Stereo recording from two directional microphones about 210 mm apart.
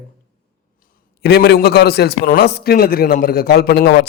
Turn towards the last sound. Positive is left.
turn(degrees=50)  # may be behind; listen again after turning